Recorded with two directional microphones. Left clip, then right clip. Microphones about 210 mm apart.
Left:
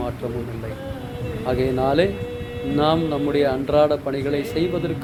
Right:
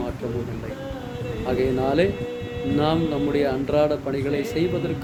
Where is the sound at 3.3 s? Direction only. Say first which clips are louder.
Left 4 dB; 15° right (ahead or behind).